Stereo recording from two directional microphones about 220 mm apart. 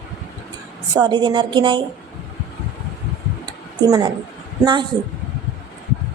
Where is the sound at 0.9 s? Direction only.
20° right (ahead or behind).